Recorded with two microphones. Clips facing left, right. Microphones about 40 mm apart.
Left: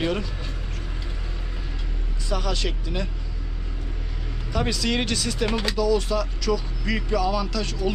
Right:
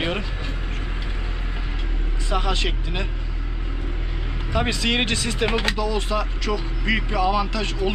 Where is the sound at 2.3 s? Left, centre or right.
Right.